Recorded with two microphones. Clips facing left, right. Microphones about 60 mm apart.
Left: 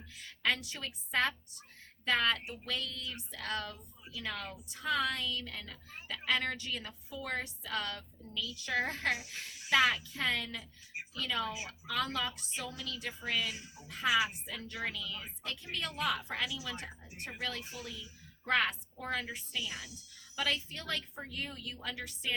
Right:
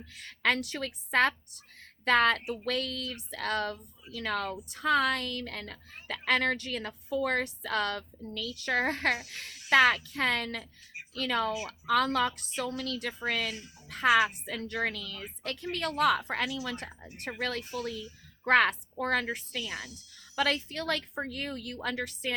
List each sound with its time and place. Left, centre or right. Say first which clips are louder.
0.1 s a woman's voice: right 5 dB; right